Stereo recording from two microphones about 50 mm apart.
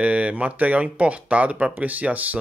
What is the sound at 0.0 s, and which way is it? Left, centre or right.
Speech, right.